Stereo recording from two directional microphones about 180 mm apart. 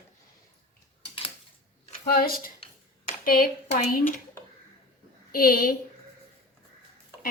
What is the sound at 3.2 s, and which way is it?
Speech, 50° left (ahead or behind).